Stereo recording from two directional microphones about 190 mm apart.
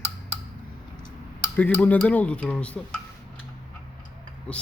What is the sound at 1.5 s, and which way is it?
Speech, 10° left (ahead or behind).